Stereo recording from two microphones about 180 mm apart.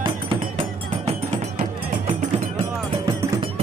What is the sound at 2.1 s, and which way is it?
Music, 35° right (ahead or behind).